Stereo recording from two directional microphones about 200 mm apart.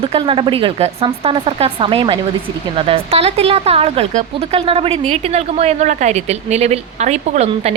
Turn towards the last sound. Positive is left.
turn(degrees=-30)  # may be behind; listen again after turning